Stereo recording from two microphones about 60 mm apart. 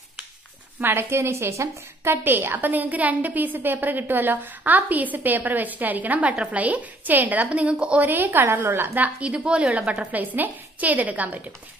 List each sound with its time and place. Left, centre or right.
0.7 s a woman's voice: right
2.2 s a woman's voice: right; by 8.0 s centre
8.0 s a woman's voice: right
9.2 s a woman's voice: centre